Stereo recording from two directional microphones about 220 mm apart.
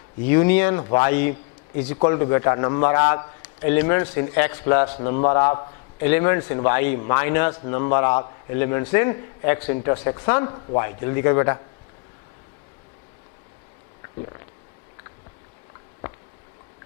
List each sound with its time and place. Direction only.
0.2 s a man's voice: 15° left (ahead or behind)